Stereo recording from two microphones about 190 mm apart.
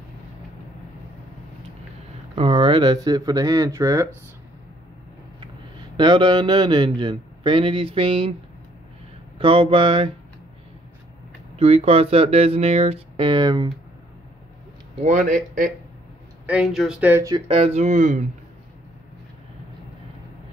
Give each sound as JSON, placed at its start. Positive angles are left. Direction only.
{"t": 2.3, "sound": "a man's voice", "side_deg": -25}
{"t": 5.9, "sound": "a man's voice", "side_deg": -25}
{"t": 9.4, "sound": "a man's voice", "side_deg": -25}
{"t": 11.5, "sound": "speech", "side_deg": -30}
{"t": 15.0, "sound": "a man's voice", "side_deg": -40}
{"t": 16.4, "sound": "speech", "side_deg": 0}
{"t": 17.5, "sound": "speech", "side_deg": -30}